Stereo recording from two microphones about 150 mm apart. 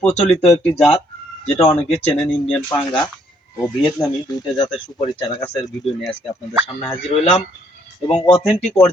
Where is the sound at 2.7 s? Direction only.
20° left (ahead or behind).